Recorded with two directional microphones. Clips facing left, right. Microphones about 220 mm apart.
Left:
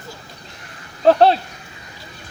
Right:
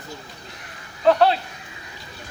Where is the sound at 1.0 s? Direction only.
40° left (ahead or behind).